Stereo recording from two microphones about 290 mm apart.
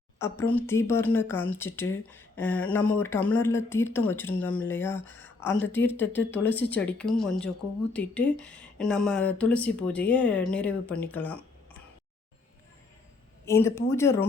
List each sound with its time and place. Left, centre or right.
0.2 s speech: centre
5.5 s a woman's voice: left
5.7 s speech: centre
13.4 s speech: centre